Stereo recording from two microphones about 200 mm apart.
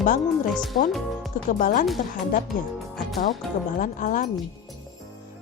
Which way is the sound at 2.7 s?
Centre (ahead or behind).